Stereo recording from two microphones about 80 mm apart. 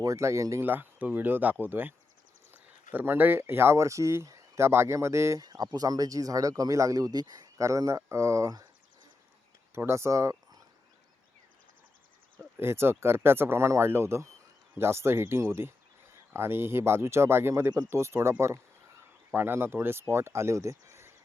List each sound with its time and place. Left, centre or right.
0.0 s speech: right
0.6 s speech: right
9.7 s speech: right
12.5 s speech: right